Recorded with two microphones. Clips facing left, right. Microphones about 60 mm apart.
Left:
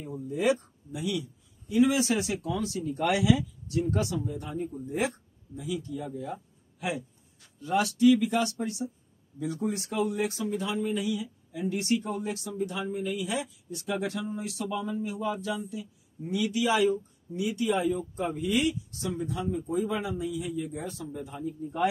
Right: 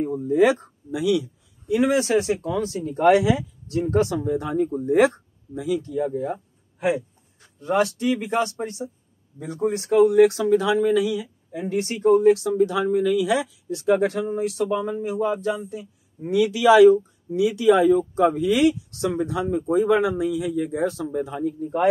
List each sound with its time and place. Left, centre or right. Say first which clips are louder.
0.0 s speech: right 12 dB; right
0.4 s speech: right 7 dB; right
1.8 s speech: right 4 dB; right
4.2 s speech: right 11 dB; right
11.1 s speech: right 5 dB; right
13.8 s speech: right 11 dB; right
16.2 s speech: right 8 dB; right